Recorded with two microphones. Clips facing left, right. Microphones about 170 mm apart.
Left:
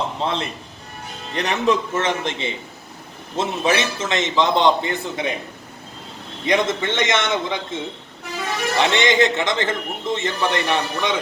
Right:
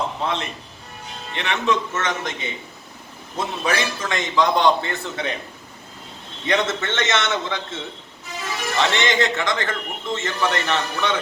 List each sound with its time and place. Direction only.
0.2 s a man's voice: 30° left (ahead or behind); by 5.4 s 15° left (ahead or behind)
6.4 s a man's voice: 15° left (ahead or behind)